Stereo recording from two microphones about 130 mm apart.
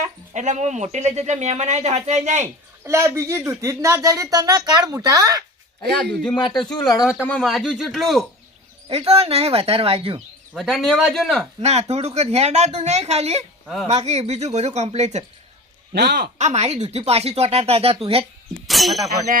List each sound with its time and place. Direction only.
0.0 s speech: 65° right (ahead or behind)
2.8 s speech: 20° right (ahead or behind)
6.3 s speech: 35° left (ahead or behind)
7.2 s speech: 10° left (ahead or behind)
7.4 s speech: centre (ahead or behind)
8.9 s speech: 50° right (ahead or behind)
10.5 s speech: centre (ahead or behind)
11.6 s speech: 55° right (ahead or behind)
16.4 s speech: 55° right (ahead or behind)
18.7 s speech: centre (ahead or behind)